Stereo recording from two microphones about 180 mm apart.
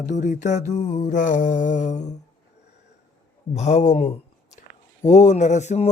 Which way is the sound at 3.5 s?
40° left (ahead or behind).